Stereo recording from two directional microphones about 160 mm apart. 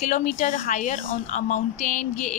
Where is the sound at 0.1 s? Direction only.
55° left (ahead or behind).